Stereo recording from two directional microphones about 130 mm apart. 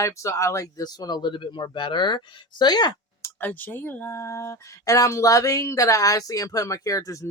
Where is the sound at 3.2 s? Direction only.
15° left (ahead or behind).